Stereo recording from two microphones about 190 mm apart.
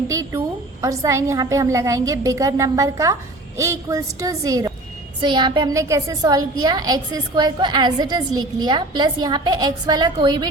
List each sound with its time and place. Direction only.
0.1 s a woman's voice: 15° right (ahead or behind)